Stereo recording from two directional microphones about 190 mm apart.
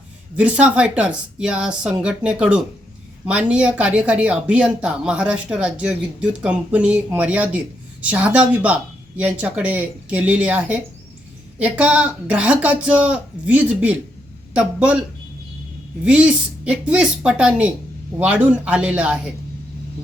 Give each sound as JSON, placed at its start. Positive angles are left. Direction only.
{"t": 0.3, "sound": "speech", "side_deg": -5}
{"t": 16.0, "sound": "speech", "side_deg": -5}